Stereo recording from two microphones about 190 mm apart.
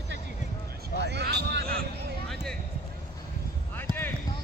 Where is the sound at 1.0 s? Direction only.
65° right (ahead or behind).